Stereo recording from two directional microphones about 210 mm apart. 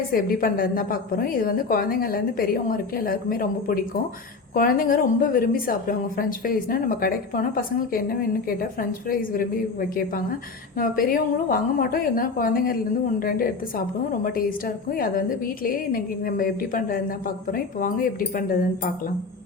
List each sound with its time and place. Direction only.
0.1 s a woman's voice: 45° left (ahead or behind)
14.8 s a woman's voice: 45° left (ahead or behind)